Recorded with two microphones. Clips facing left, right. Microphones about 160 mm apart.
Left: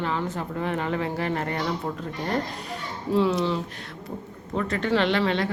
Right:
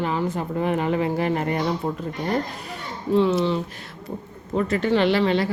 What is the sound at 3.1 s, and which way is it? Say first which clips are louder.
Speech: right 3 dB; centre (ahead or behind).